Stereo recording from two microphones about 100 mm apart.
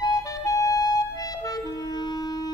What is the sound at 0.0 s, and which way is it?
Clarinet, 35° left (ahead or behind).